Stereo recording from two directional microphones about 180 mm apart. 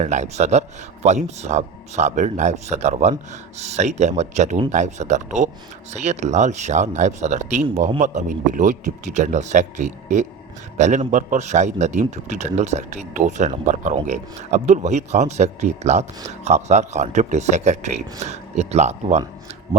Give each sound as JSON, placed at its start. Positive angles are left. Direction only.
{"t": 0.0, "sound": "a man's voice", "side_deg": -40}